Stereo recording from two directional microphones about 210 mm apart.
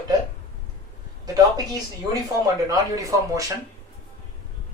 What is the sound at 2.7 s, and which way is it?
Speech, 15° right (ahead or behind).